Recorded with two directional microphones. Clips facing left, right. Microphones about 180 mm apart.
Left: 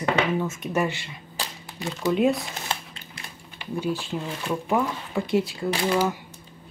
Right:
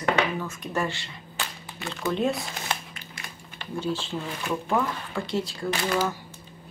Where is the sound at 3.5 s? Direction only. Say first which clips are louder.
Left 2 dB; 15° left (ahead or behind).